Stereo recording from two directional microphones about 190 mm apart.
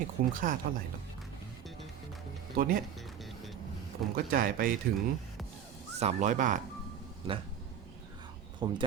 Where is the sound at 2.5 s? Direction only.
50° right (ahead or behind).